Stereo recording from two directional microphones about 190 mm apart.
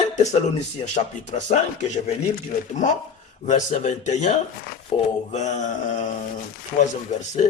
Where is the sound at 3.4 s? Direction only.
40° left (ahead or behind).